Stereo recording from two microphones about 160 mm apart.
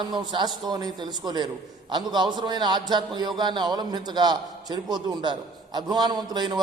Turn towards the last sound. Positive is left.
turn(degrees=-25)  # may be behind; listen again after turning